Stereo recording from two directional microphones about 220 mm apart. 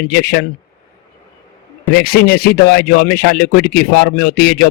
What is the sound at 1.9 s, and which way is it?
A man's voice, 45° left (ahead or behind).